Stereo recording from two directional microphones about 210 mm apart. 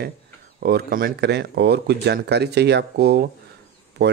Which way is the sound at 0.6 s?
45° right (ahead or behind).